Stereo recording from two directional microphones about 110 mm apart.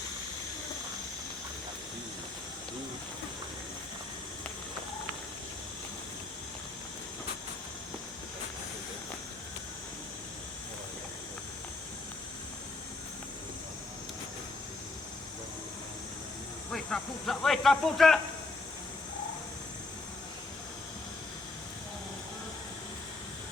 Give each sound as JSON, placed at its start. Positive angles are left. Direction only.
{"t": 16.7, "sound": "speech", "side_deg": 5}